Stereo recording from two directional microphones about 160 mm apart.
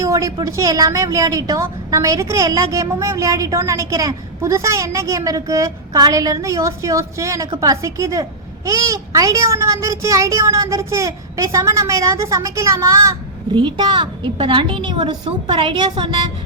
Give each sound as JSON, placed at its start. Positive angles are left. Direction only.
{"t": 0.0, "sound": "a woman's voice", "side_deg": -20}